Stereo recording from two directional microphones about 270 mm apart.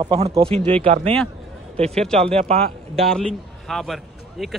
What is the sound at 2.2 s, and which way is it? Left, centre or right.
Speech, right.